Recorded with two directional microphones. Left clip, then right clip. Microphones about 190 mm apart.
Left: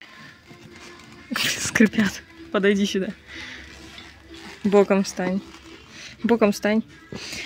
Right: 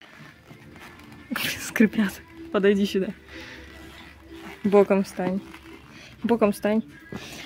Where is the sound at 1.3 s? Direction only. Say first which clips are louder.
Left 5 dB; centre (ahead or behind).